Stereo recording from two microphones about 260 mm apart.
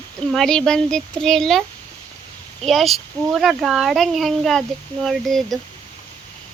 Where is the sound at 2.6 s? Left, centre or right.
Centre.